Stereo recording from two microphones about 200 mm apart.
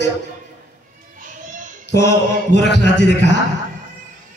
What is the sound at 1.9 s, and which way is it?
A man's voice, 60° left (ahead or behind).